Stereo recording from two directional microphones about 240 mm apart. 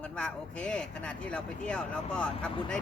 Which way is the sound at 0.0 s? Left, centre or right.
Centre.